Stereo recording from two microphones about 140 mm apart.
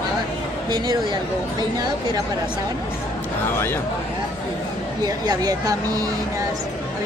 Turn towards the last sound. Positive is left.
turn(degrees=-25)  # may be behind; listen again after turning